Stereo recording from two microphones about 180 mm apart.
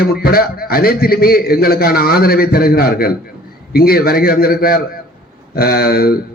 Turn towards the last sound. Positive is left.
turn(degrees=55)  # may be behind; listen again after turning